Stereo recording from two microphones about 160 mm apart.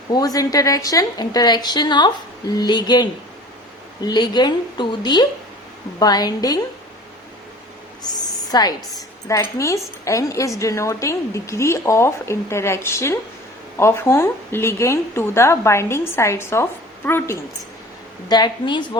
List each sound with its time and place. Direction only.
0.1 s a woman's voice: 20° left (ahead or behind)
8.1 s a sound: 25° left (ahead or behind)
9.2 s a woman's voice: 20° left (ahead or behind)
18.3 s a woman's voice: 25° left (ahead or behind)